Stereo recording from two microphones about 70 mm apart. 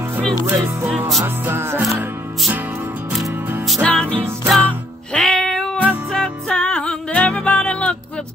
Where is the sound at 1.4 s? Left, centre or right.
Right.